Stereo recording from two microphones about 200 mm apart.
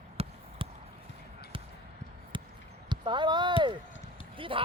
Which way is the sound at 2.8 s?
25° right (ahead or behind).